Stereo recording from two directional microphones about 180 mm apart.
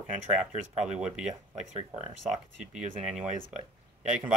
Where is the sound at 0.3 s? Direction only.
40° right (ahead or behind).